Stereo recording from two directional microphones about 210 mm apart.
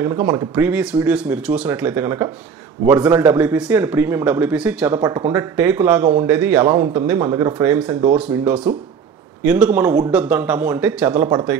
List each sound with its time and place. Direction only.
0.0 s a man's voice: 10° right (ahead or behind)
3.3 s a man's voice: 5° right (ahead or behind)
5.0 s speech: 20° right (ahead or behind)
5.3 s a man's voice: 10° right (ahead or behind)